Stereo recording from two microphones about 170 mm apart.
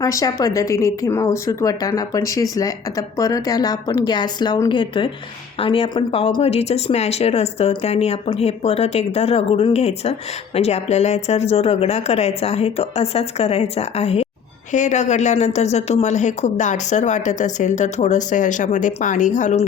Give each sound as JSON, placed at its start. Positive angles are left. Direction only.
{"t": 0.0, "sound": "a woman's voice", "side_deg": 20}